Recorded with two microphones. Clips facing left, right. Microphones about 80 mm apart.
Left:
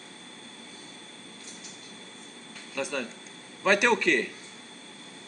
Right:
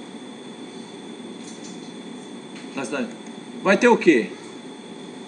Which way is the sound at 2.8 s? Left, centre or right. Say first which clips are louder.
Right 5 dB; centre.